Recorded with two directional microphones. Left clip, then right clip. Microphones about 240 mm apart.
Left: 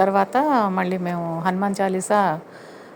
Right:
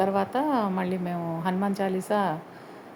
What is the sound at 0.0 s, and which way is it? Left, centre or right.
A woman's voice, centre.